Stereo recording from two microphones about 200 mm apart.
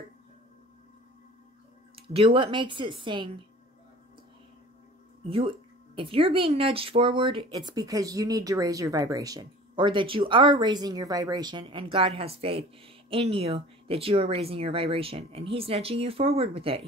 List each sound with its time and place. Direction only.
2.0 s speech: 25° right (ahead or behind)
5.3 s speech: 25° right (ahead or behind)